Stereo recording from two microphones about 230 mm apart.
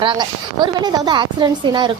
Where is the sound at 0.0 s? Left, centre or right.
Centre.